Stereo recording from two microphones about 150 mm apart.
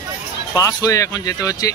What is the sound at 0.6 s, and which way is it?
Speech, 25° left (ahead or behind).